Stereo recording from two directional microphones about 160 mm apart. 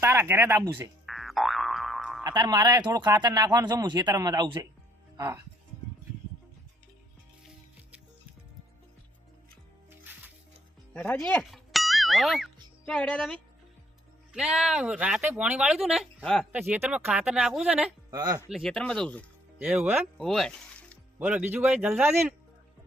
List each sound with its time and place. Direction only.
0.0 s a man's voice: 15° right (ahead or behind)
1.0 s boing: centre (ahead or behind)
2.2 s speech: 25° right (ahead or behind)
10.9 s speech: 10° left (ahead or behind)
11.5 s music: centre (ahead or behind)
12.8 s speech: 10° left (ahead or behind)
16.5 s a man's voice: 10° right (ahead or behind)
18.1 s speech: 25° right (ahead or behind)
18.4 s speech: centre (ahead or behind)
19.5 s a man's voice: 5° right (ahead or behind)
20.1 s speech: centre (ahead or behind)
21.2 s a man's voice: 10° right (ahead or behind)